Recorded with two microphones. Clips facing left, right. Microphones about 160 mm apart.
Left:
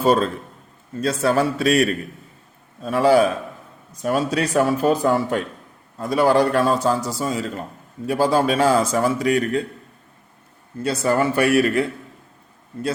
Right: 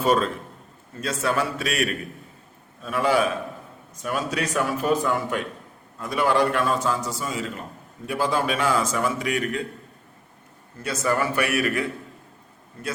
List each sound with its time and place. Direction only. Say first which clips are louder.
0.0 s a man's voice: left 3 dB; 35° left (ahead or behind)
10.8 s a man's voice: left 5 dB; 30° left (ahead or behind)